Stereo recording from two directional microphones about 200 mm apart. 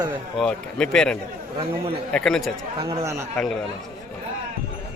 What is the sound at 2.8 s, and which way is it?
Speech, 15° right (ahead or behind).